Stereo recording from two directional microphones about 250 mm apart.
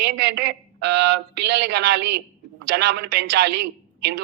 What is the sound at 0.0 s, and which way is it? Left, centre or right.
A man's voice, right.